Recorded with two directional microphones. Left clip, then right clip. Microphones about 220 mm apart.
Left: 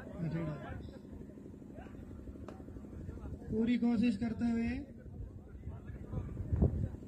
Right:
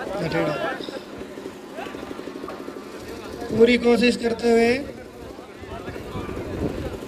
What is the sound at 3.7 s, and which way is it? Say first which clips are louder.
A man's voice: right 17 dB; 40° right (ahead or behind).